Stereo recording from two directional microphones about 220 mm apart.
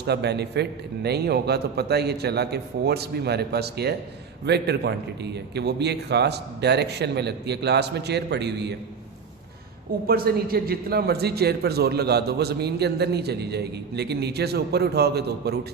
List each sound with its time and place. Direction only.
0.0 s a man's voice: 50° right (ahead or behind)
10.1 s a man's voice: 45° right (ahead or behind)